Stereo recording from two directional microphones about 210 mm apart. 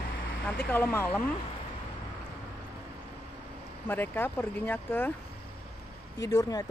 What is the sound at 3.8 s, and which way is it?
Speech, 10° left (ahead or behind).